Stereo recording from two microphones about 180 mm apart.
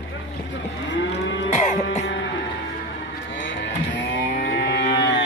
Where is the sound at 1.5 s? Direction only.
40° left (ahead or behind).